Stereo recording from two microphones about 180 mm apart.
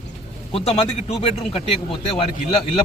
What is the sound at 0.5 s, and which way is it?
Speech, 30° left (ahead or behind).